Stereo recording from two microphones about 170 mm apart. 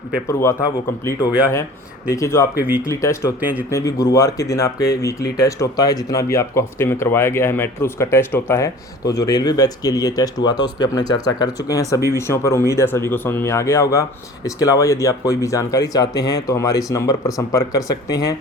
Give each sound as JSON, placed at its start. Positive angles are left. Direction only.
{"t": 0.3, "sound": "speech", "side_deg": 15}
{"t": 2.0, "sound": "speech", "side_deg": 15}